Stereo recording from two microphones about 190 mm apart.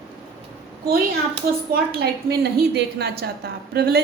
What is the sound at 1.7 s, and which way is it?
A woman's voice, 55° right (ahead or behind).